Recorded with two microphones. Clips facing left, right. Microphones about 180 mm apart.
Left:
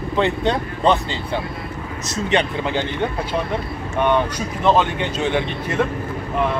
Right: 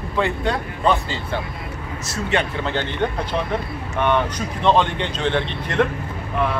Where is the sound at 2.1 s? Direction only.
20° left (ahead or behind).